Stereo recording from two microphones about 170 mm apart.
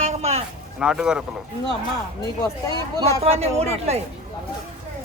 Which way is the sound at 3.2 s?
35° right (ahead or behind).